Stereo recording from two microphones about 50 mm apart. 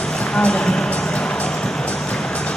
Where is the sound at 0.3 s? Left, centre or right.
Centre.